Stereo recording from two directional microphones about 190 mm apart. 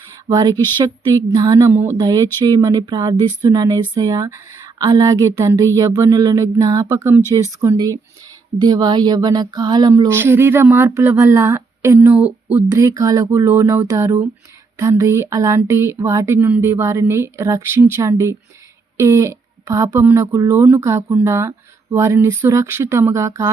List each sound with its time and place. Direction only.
0.3 s speech: 20° right (ahead or behind)